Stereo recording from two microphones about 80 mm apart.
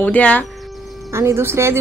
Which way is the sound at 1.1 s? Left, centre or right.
Right.